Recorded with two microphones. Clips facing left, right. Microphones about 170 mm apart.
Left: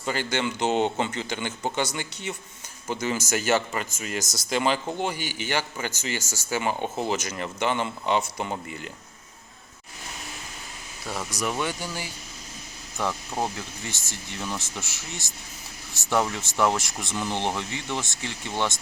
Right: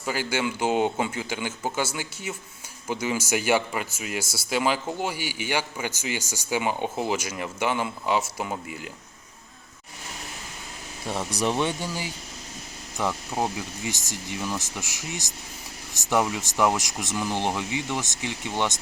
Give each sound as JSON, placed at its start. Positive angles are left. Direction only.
{"t": 0.0, "sound": "speech", "side_deg": -10}
{"t": 11.0, "sound": "speech", "side_deg": -25}